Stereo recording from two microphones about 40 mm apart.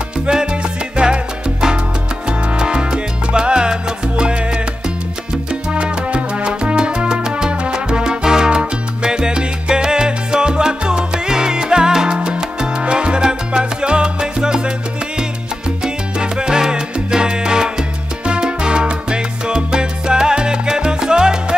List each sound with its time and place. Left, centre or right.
0.3 s salsa music: right
5.5 s salsa music: right
12.2 s music: centre
12.8 s salsa music: right
15.8 s salsa music: centre